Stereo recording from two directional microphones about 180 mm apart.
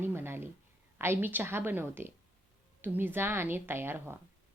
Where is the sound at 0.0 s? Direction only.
15° right (ahead or behind).